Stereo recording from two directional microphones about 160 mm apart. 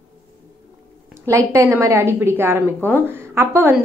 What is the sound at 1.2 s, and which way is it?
A woman's voice, 20° right (ahead or behind).